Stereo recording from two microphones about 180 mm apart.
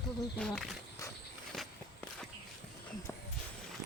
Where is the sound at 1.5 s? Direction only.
5° left (ahead or behind).